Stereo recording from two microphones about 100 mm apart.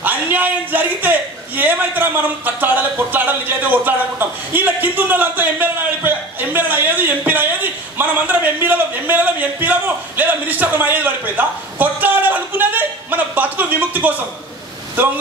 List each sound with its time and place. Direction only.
0.0 s speech: 20° right (ahead or behind)
1.6 s a sound: 20° right (ahead or behind)
15.0 s speech: 20° right (ahead or behind)